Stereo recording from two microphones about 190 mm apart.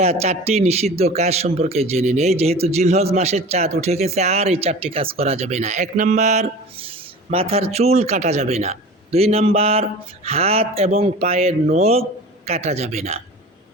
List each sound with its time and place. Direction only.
0.0 s a man's voice: 35° right (ahead or behind)